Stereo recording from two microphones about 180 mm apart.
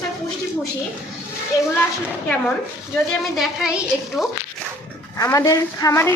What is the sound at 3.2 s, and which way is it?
A woman's voice, centre (ahead or behind).